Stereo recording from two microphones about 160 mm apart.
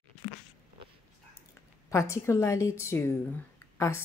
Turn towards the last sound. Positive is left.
turn(degrees=15)  # may be behind; listen again after turning